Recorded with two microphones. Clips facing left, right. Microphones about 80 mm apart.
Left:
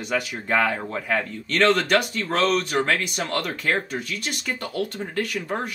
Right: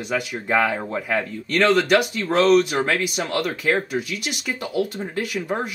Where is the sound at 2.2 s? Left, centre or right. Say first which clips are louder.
Right 6 dB; centre.